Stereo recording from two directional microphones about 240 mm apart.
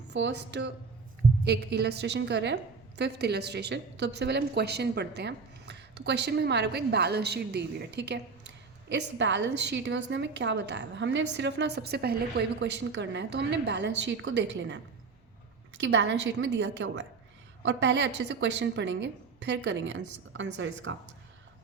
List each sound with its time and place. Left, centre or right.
0.1 s a woman's voice: right
15.8 s a woman's voice: right